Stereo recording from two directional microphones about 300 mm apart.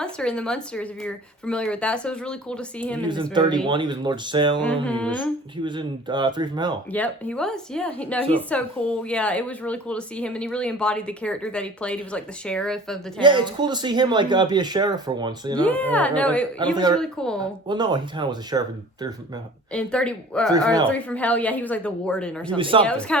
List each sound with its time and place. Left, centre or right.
0.0 s a woman's voice: centre
3.3 s speech: centre
4.6 s a woman's voice: centre
5.6 s speech: centre
6.9 s a woman's voice: centre
13.2 s speech: centre
15.6 s a woman's voice: centre
17.7 s speech: centre
19.7 s a woman's voice: centre
22.5 s speech: centre
22.9 s a woman's voice: centre